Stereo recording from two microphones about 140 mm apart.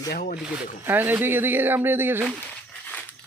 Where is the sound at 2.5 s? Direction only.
10° left (ahead or behind).